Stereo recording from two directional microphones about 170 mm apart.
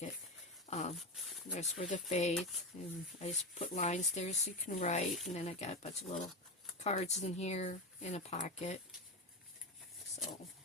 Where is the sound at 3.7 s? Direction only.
45° left (ahead or behind).